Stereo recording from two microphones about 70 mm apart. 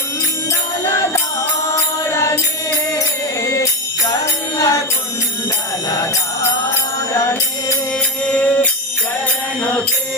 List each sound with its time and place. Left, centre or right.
2.0 s music: left
3.4 s music: left
8.2 s music: left